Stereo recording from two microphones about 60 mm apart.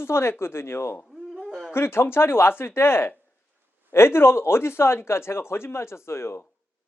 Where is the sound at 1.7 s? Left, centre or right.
Left.